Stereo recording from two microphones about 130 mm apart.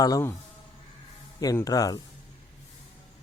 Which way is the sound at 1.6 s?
30° left (ahead or behind).